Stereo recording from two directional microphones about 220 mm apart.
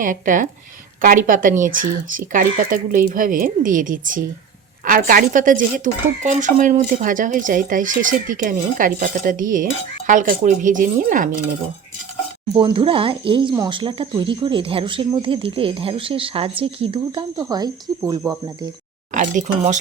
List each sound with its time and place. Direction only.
0.0 s speech: 35° right (ahead or behind)
12.5 s speech: 20° right (ahead or behind)
19.1 s speech: 35° right (ahead or behind)